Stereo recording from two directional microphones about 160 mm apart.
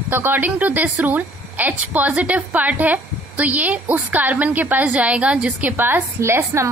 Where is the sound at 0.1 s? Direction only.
15° right (ahead or behind).